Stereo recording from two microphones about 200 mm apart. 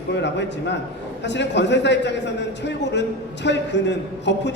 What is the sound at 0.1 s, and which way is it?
A man's voice, 60° left (ahead or behind).